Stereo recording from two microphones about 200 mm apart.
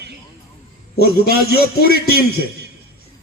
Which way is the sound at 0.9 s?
50° left (ahead or behind).